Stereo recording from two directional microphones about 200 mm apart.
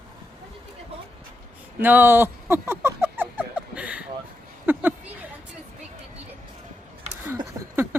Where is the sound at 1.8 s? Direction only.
10° right (ahead or behind).